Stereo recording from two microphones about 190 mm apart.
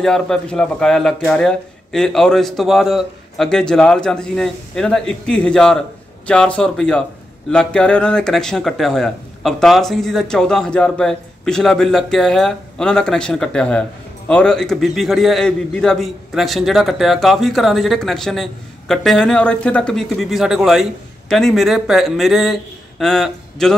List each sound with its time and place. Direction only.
0.0 s speech: 5° left (ahead or behind)